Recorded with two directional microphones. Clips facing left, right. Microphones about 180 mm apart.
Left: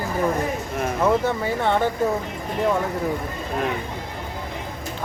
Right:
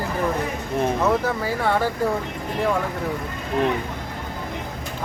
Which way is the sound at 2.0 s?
20° left (ahead or behind).